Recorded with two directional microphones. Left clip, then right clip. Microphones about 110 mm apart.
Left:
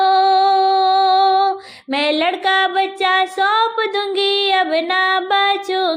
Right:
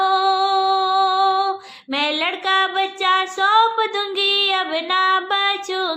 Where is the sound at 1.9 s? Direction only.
35° left (ahead or behind).